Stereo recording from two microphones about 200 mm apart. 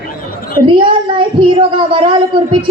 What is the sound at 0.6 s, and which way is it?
A woman's voice, 25° right (ahead or behind).